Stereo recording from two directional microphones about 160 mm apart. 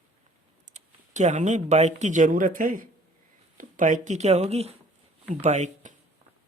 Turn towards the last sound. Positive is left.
turn(degrees=-45)  # may be behind; listen again after turning